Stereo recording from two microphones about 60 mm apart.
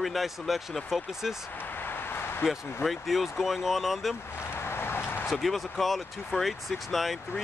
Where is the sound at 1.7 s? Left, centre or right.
Left.